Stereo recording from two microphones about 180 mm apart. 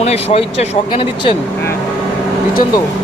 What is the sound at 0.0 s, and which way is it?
Speech, 35° left (ahead or behind).